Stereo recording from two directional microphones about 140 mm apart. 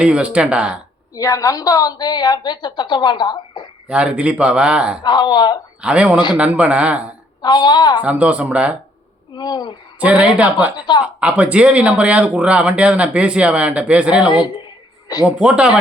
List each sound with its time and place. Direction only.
0.0 s speech: 10° right (ahead or behind)
1.1 s a woman's voice: 25° left (ahead or behind)
3.8 s speech: 5° right (ahead or behind)
5.0 s a woman's voice: 30° left (ahead or behind)
5.8 s speech: 10° right (ahead or behind)
7.4 s a woman's voice: 30° left (ahead or behind)
8.0 s speech: 10° right (ahead or behind)
9.3 s a woman's voice: 30° left (ahead or behind)
10.0 s speech: 10° right (ahead or behind)
10.8 s a woman's voice: 30° left (ahead or behind)
11.0 s speech: 10° right (ahead or behind)
14.3 s a woman's voice: 35° left (ahead or behind)
15.2 s speech: 10° right (ahead or behind)